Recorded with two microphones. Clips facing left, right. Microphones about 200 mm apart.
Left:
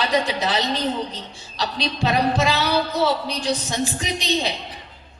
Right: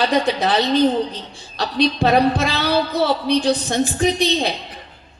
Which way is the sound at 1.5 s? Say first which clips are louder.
Right 7 dB; 55° right (ahead or behind).